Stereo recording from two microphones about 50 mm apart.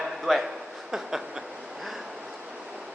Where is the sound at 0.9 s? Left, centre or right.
Centre.